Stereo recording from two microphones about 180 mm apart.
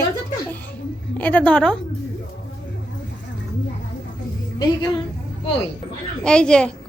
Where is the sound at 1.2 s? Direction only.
10° left (ahead or behind).